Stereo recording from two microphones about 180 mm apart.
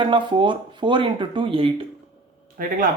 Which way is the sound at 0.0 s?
25° right (ahead or behind).